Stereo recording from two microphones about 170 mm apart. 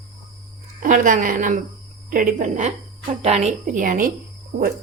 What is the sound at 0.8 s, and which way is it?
Speech, 50° right (ahead or behind).